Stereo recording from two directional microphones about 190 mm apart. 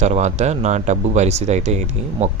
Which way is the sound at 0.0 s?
35° right (ahead or behind).